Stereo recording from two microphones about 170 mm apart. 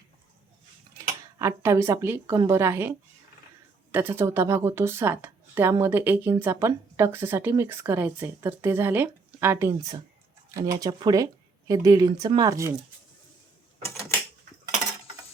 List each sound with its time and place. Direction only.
1.4 s a woman's voice: 15° right (ahead or behind)
3.9 s a woman's voice: 10° right (ahead or behind)